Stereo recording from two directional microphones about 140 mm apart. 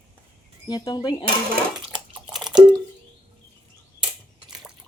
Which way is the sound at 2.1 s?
Centre (ahead or behind).